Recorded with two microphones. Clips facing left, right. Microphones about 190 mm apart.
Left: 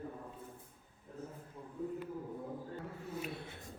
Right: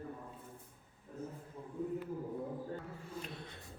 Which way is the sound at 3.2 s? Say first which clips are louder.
Left 4 dB; 5° left (ahead or behind).